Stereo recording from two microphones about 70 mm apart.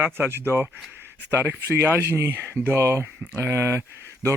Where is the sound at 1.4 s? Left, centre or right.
Right.